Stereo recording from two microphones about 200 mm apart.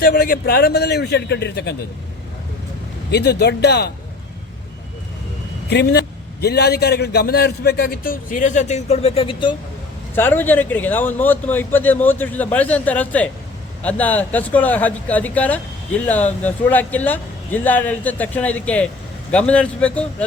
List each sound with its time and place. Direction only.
0.0 s a man's voice: 45° left (ahead or behind)
3.1 s speech: 55° left (ahead or behind)
5.6 s a man's voice: 55° left (ahead or behind); by 9.6 s 25° left (ahead or behind)
10.2 s speech: 10° left (ahead or behind)